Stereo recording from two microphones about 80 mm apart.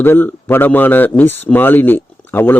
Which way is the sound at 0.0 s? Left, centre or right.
Left.